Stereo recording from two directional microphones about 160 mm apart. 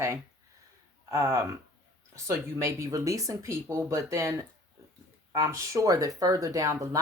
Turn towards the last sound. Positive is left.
turn(degrees=-20)  # may be behind; listen again after turning